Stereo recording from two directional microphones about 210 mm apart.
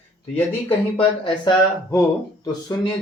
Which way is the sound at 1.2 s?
20° left (ahead or behind).